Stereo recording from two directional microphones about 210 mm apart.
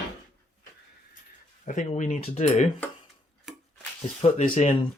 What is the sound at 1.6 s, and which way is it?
Speech, 35° left (ahead or behind).